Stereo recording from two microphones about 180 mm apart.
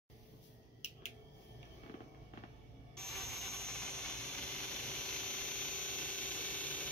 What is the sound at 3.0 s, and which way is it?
Squeal, 5° left (ahead or behind).